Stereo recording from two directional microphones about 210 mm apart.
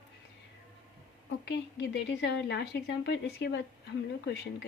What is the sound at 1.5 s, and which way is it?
A woman's voice, 55° left (ahead or behind).